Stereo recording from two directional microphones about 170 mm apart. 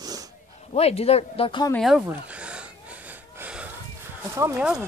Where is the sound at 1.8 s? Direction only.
Centre (ahead or behind).